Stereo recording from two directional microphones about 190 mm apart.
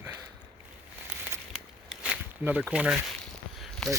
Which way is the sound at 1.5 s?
5° right (ahead or behind).